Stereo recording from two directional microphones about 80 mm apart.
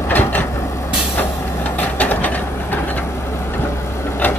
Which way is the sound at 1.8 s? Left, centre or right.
Left.